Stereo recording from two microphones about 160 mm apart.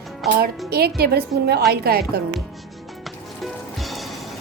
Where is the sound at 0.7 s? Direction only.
75° right (ahead or behind).